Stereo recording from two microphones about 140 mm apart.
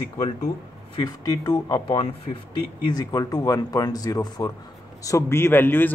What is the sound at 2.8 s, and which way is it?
Speech, 30° left (ahead or behind).